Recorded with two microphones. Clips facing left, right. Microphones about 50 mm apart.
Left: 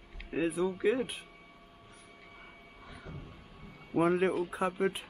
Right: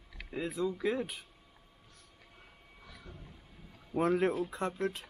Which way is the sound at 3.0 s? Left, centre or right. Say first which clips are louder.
Left 5 dB; left.